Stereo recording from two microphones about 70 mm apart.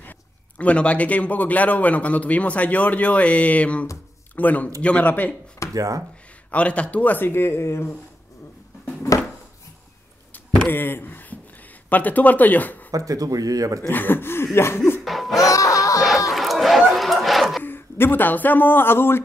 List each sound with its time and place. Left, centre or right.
0.0 s a man's voice: left
5.7 s speech: right
6.5 s a man's voice: centre; by 7.9 s left
10.3 s a sound: left
11.9 s a man's voice: left
12.9 s speech: right
13.8 s a sound: left
15.0 s laughter: centre
15.5 s snicker: left
16.3 s run: centre
16.9 s a sound: centre
17.6 s speech: left